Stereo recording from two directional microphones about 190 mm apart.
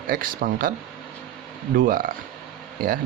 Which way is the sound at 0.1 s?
50° right (ahead or behind).